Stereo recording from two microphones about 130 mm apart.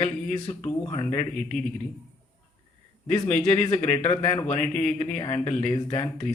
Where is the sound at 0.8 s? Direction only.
25° left (ahead or behind).